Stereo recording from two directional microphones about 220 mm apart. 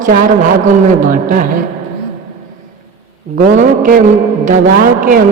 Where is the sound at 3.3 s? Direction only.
40° right (ahead or behind).